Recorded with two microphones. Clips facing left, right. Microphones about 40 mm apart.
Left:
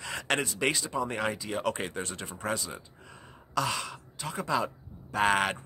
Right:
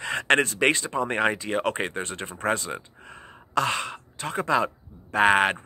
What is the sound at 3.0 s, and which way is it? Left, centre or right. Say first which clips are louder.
Speech: right 5 dB; right.